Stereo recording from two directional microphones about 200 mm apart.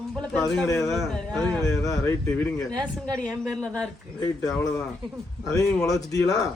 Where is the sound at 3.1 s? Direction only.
5° left (ahead or behind).